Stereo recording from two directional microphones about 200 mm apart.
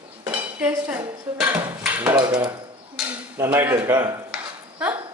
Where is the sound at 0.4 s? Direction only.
5° right (ahead or behind).